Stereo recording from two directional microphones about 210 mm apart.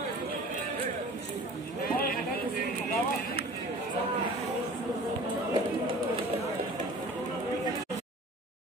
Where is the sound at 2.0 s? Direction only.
45° left (ahead or behind).